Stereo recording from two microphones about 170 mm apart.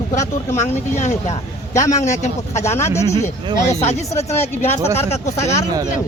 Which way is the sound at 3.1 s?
40° left (ahead or behind).